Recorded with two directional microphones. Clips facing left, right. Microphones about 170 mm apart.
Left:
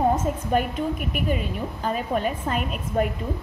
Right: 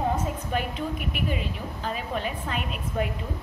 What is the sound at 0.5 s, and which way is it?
A woman's voice, 45° left (ahead or behind).